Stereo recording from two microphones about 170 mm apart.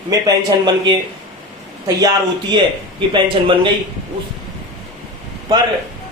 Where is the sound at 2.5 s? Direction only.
30° right (ahead or behind).